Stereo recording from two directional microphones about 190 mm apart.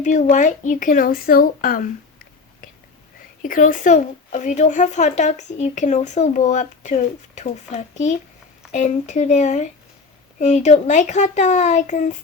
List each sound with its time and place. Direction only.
0.0 s speech: 40° left (ahead or behind)
3.4 s speech: 45° left (ahead or behind)